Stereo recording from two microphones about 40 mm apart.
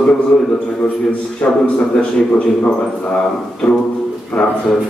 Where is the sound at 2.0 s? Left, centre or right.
Left.